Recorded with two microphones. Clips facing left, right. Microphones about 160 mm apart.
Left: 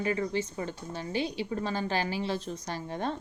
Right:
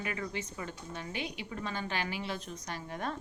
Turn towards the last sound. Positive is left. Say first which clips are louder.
# left 5 dB
turn(degrees=30)  # may be behind; listen again after turning